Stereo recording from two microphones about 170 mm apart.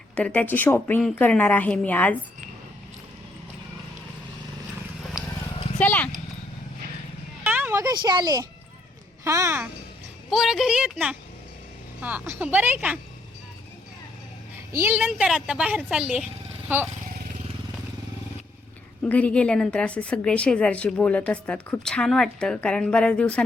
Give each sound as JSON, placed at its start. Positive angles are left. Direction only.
{"t": 0.2, "sound": "a woman's voice", "side_deg": 10}
{"t": 5.8, "sound": "horse", "side_deg": 10}
{"t": 7.4, "sound": "a sound", "side_deg": -10}
{"t": 9.2, "sound": "speech", "side_deg": -15}
{"t": 10.2, "sound": "a woman's voice", "side_deg": 0}
{"t": 14.8, "sound": "a woman's voice", "side_deg": -10}
{"t": 19.0, "sound": "a woman's voice", "side_deg": 10}